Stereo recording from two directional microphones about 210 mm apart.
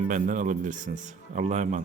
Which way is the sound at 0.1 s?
40° right (ahead or behind).